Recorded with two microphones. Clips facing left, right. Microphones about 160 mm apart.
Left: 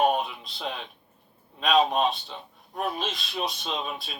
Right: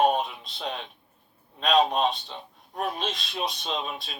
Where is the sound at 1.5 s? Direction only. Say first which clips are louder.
Even; centre (ahead or behind).